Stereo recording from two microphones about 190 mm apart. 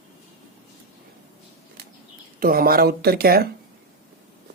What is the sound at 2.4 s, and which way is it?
Speech, 50° right (ahead or behind).